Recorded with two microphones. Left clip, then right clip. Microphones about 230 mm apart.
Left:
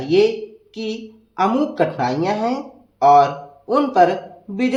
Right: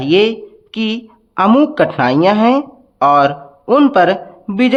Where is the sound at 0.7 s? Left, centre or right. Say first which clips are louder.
Right 8 dB; right.